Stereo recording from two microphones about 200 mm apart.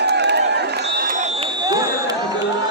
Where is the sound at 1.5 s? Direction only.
20° right (ahead or behind).